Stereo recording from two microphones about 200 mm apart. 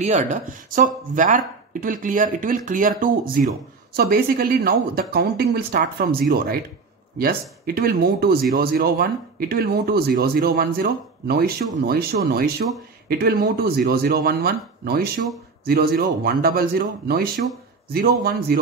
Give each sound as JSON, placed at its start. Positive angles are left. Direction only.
{"t": 0.0, "sound": "speech", "side_deg": -40}